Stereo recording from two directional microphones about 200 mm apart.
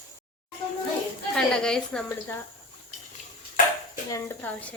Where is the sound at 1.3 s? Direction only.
5° left (ahead or behind).